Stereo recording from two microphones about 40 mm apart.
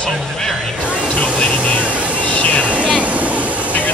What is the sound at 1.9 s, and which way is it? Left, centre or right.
Vehicle, right.